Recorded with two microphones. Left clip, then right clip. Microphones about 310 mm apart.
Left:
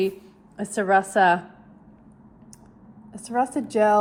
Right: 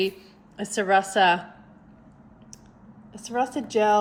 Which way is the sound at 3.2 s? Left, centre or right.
Centre.